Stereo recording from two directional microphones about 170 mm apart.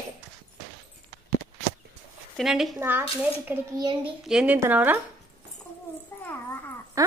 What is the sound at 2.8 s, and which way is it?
Speech, 10° right (ahead or behind).